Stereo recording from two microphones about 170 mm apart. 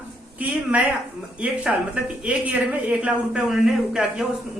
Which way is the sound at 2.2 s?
10° right (ahead or behind).